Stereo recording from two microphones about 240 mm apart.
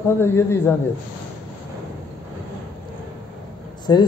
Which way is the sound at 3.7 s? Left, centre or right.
Centre.